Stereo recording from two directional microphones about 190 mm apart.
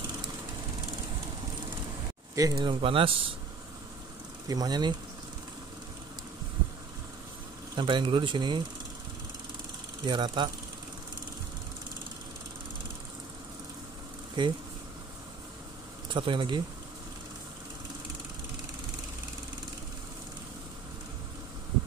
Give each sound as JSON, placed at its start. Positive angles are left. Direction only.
{"t": 2.3, "sound": "speech", "side_deg": -15}
{"t": 4.5, "sound": "speech", "side_deg": -20}
{"t": 7.7, "sound": "speech", "side_deg": -25}
{"t": 10.0, "sound": "speech", "side_deg": -25}
{"t": 14.4, "sound": "speech", "side_deg": -25}
{"t": 16.1, "sound": "speech", "side_deg": -25}